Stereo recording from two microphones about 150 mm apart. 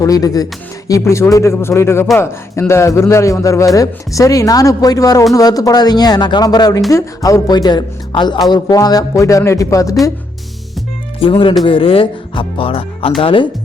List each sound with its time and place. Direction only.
0.0 s speech: 25° left (ahead or behind)
11.2 s speech: 35° left (ahead or behind)